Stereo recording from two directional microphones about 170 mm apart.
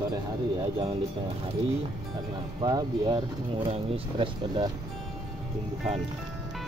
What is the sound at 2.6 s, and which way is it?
Speech, 25° right (ahead or behind).